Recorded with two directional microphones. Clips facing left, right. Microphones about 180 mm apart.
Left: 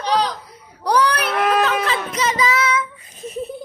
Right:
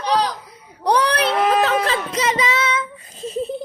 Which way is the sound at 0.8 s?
25° right (ahead or behind).